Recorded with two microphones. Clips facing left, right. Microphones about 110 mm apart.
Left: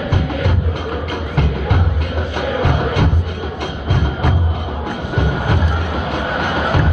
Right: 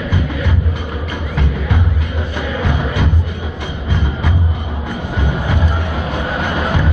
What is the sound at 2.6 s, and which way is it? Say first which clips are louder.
Music: left 2 dB; 60° left (ahead or behind).